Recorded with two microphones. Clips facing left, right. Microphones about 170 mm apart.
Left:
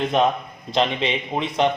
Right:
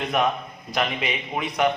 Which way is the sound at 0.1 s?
25° left (ahead or behind).